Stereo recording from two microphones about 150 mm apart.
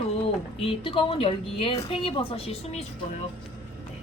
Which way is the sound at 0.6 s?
35° left (ahead or behind).